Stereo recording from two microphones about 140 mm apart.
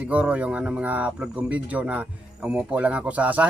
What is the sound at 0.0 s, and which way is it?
Speech, 10° right (ahead or behind).